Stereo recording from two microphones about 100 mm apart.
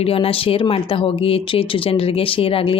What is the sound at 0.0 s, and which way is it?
Speech, 70° left (ahead or behind).